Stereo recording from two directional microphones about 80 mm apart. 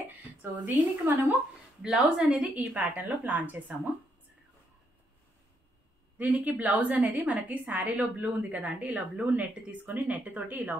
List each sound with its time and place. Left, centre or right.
0.4 s a woman's voice: right
1.8 s a woman's voice: centre
2.7 s a woman's voice: right
6.1 s a woman's voice: centre